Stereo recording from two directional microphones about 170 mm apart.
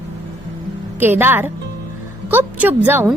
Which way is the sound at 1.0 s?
10° right (ahead or behind).